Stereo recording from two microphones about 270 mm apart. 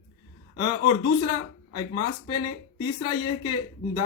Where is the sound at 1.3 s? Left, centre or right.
Centre.